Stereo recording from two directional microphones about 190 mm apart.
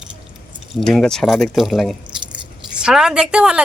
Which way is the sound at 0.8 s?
5° left (ahead or behind).